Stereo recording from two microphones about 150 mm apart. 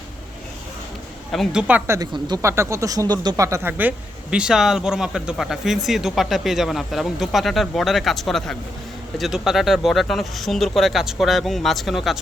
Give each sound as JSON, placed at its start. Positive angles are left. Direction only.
{"t": 1.3, "sound": "speech", "side_deg": 0}
{"t": 1.6, "sound": "a woman's voice", "side_deg": -10}
{"t": 2.0, "sound": "speech", "side_deg": -30}
{"t": 2.4, "sound": "speech", "side_deg": -20}